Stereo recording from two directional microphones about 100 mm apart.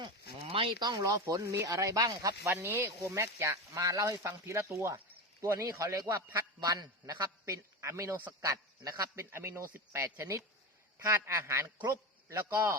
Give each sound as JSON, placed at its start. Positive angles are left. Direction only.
{"t": 0.3, "sound": "a sound", "side_deg": -70}
{"t": 0.8, "sound": "speech", "side_deg": -45}
{"t": 2.5, "sound": "speech", "side_deg": -20}
{"t": 11.8, "sound": "a man's voice", "side_deg": -40}